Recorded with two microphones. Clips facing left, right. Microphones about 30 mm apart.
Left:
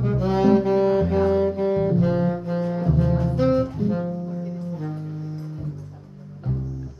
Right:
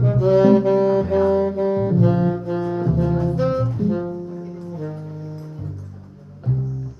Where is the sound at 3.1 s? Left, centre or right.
Centre.